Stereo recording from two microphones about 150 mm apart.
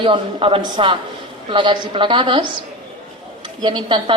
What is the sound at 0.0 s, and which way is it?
Speech, 35° right (ahead or behind).